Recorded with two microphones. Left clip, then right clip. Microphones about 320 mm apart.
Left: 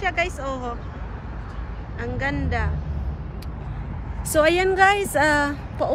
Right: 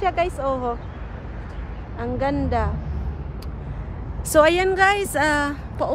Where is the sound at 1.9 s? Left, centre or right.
Centre.